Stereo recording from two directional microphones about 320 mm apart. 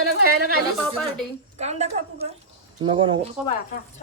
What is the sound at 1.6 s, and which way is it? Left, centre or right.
Speech, right.